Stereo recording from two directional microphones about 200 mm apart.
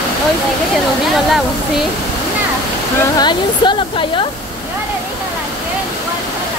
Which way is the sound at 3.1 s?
20° left (ahead or behind).